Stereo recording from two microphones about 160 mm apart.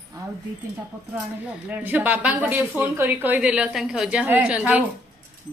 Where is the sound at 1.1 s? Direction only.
10° right (ahead or behind).